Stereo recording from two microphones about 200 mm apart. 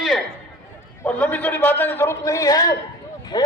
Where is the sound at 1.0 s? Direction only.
10° left (ahead or behind).